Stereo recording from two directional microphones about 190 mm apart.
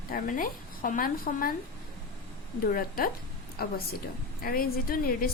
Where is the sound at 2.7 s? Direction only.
50° left (ahead or behind).